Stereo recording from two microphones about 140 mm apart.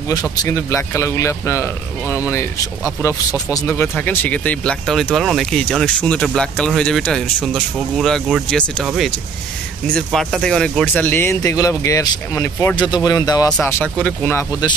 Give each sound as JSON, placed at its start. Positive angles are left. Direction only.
{"t": 0.4, "sound": "speech", "side_deg": 20}
{"t": 12.7, "sound": "speech", "side_deg": 30}
{"t": 13.5, "sound": "speech", "side_deg": 10}